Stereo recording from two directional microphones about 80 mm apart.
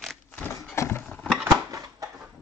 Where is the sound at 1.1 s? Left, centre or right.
Centre.